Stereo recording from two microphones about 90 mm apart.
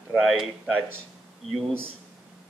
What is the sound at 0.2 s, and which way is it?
Speech, centre (ahead or behind).